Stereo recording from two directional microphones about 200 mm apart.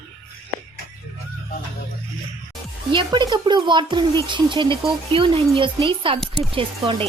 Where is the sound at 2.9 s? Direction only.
25° right (ahead or behind).